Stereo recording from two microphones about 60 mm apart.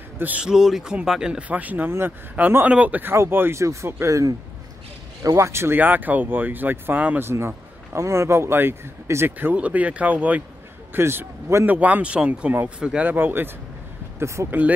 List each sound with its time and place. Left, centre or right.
0.4 s a man's voice: centre
1.5 s speech: right
1.9 s speech: right
2.6 s speech: right
3.1 s speech: right
3.5 s speech: right
5.8 s speech: right
7.2 s speech: right
9.6 s speech: right
10.9 s speech: right
11.6 s speech: right
14.2 s speech: right